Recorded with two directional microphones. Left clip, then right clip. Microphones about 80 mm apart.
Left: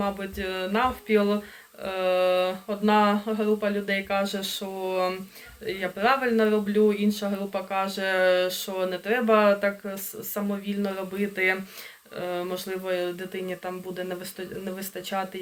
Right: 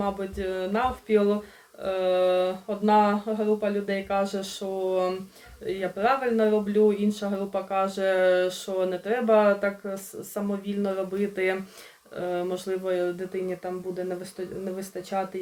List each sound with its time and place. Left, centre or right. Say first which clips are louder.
0.0 s speech: even; right
10.8 s speech: right 3 dB; right
13.3 s speech: right 2 dB; right